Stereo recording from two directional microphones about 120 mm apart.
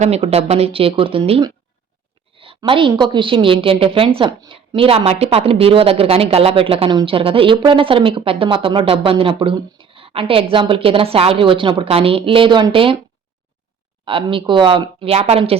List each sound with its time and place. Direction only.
0.0 s speech: 60° right (ahead or behind)
2.3 s a sound: 45° right (ahead or behind)
2.6 s speech: 45° right (ahead or behind)
4.3 s speech: 40° right (ahead or behind)
14.0 s speech: 45° right (ahead or behind)